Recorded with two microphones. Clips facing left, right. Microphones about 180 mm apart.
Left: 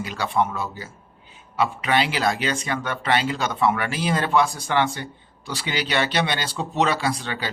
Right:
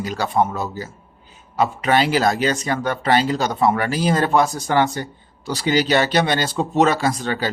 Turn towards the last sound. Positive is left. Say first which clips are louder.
# right 5 dB
turn(degrees=-45)  # may be behind; listen again after turning